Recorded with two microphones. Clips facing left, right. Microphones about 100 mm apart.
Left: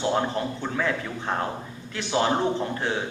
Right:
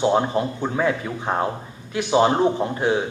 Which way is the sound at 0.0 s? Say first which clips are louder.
Right 5 dB; 20° right (ahead or behind).